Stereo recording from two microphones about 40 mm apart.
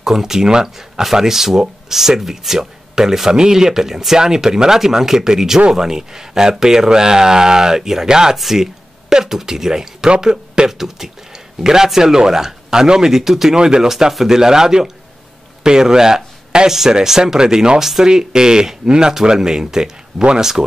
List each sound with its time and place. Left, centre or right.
0.0 s speech: centre
13.6 s speech: right